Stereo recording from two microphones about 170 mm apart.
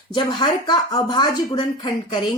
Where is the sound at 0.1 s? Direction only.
25° left (ahead or behind).